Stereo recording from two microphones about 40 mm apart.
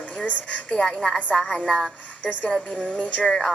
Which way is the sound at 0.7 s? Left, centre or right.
Centre.